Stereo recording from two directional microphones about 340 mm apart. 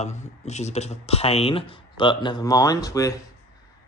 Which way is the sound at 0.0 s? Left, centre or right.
Centre.